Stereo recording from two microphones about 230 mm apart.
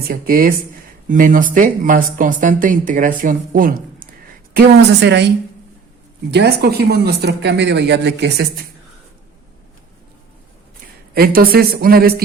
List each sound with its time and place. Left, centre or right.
0.1 s speech: right
6.3 s speech: right
11.1 s speech: right